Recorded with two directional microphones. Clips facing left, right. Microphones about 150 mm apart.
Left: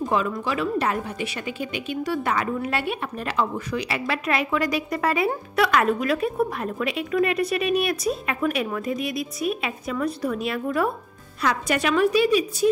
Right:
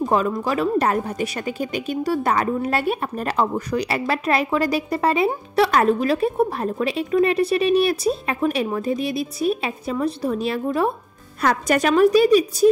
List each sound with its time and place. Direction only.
0.0 s a sound: 40° right (ahead or behind)
0.5 s speech: 40° right (ahead or behind)
11.4 s speech: 45° right (ahead or behind)